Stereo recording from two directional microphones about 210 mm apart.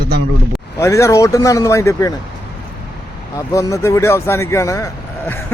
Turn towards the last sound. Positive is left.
turn(degrees=15)  # may be behind; listen again after turning